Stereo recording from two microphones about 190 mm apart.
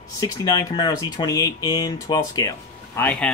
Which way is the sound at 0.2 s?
20° left (ahead or behind).